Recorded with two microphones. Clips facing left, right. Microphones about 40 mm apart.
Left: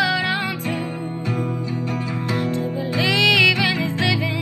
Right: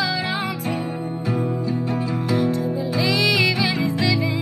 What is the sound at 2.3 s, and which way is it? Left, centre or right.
Music, left.